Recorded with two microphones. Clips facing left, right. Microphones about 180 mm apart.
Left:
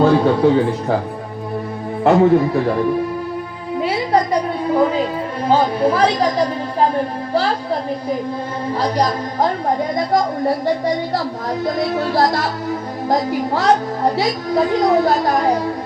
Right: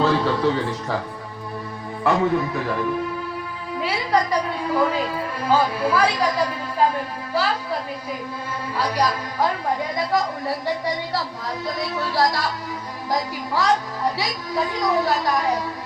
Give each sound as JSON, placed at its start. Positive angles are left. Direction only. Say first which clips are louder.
{"t": 0.2, "sound": "a woman's voice", "louder": "left 7 dB", "side_deg": 50}
{"t": 2.0, "sound": "speech", "louder": "left 8 dB", "side_deg": 40}
{"t": 3.8, "sound": "a sound", "louder": "left 5 dB", "side_deg": 35}
{"t": 5.5, "sound": "speech", "louder": "left 5 dB", "side_deg": 30}
{"t": 5.9, "sound": "a woman's voice", "louder": "left 4 dB", "side_deg": 40}